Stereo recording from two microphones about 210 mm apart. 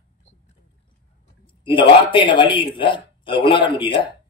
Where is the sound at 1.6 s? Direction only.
25° left (ahead or behind).